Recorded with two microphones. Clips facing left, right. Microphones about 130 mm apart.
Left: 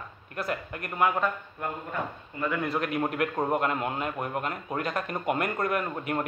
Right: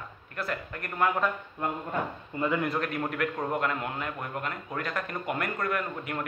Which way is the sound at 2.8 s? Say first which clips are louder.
Left 2 dB; 20° left (ahead or behind).